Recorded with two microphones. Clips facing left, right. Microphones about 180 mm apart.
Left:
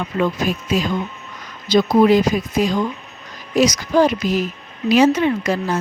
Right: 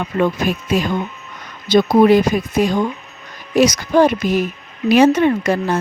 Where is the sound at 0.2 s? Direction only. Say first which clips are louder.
Right 2 dB; 55° right (ahead or behind).